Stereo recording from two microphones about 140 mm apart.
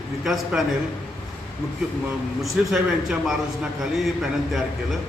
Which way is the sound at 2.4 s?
Centre (ahead or behind).